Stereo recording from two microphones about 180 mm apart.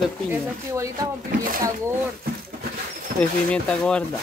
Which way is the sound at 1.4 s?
50° right (ahead or behind).